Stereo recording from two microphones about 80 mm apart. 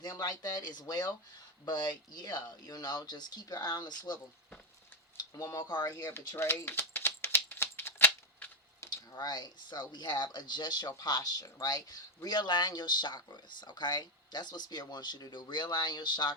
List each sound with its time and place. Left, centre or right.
0.0 s speech: left
6.0 s a sound: left
9.1 s speech: left